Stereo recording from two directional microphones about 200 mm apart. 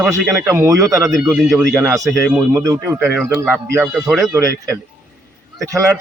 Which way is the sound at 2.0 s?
Centre (ahead or behind).